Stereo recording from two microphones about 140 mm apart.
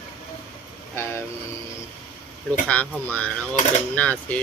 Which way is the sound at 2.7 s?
10° left (ahead or behind).